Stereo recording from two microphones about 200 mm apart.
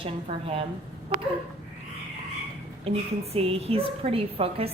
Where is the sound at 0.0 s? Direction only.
30° right (ahead or behind).